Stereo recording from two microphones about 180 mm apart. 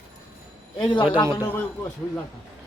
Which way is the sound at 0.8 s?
25° left (ahead or behind).